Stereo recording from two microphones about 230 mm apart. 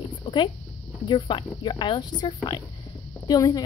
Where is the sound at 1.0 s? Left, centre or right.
Left.